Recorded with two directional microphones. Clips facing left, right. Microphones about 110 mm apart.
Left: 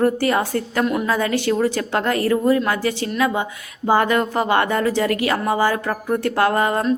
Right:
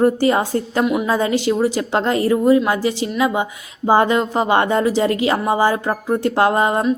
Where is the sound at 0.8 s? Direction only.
10° right (ahead or behind).